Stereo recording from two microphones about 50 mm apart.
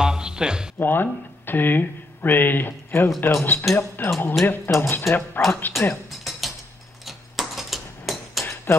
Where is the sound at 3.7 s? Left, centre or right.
Centre.